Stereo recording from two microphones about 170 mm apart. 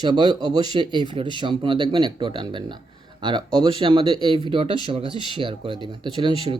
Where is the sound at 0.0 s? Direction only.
25° right (ahead or behind).